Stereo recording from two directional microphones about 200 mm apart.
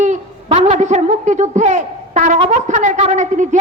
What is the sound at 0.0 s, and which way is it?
A woman's voice, 35° right (ahead or behind).